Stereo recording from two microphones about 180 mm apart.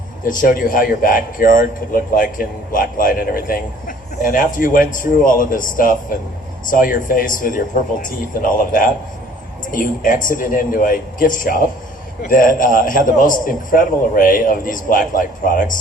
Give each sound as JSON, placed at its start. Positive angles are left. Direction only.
{"t": 0.3, "sound": "a man's voice", "side_deg": 50}